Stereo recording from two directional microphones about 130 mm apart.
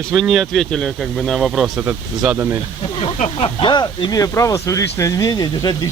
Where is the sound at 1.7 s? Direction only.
10° right (ahead or behind).